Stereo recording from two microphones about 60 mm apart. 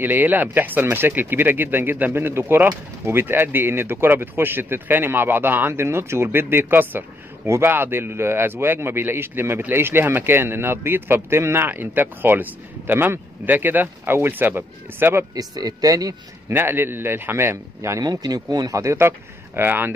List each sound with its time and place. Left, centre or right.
0.0 s speech: right
15.3 s speech: right
16.4 s speech: right
17.9 s speech: right